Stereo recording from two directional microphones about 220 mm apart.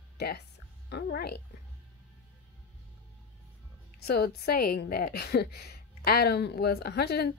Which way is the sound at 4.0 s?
45° left (ahead or behind).